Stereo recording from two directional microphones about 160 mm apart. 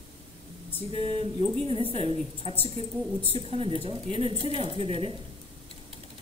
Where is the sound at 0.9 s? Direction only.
35° right (ahead or behind).